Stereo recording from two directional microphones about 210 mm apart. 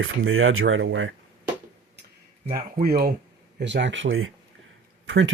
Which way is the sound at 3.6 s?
60° right (ahead or behind).